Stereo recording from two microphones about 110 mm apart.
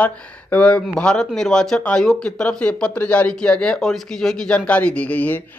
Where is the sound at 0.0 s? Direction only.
10° left (ahead or behind).